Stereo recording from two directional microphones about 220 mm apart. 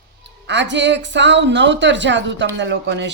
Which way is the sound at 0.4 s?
55° right (ahead or behind).